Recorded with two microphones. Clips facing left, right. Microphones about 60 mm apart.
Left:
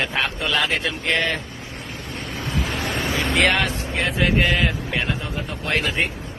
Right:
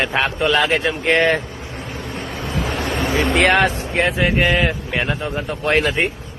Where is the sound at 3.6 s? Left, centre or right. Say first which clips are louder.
Right 6 dB; right.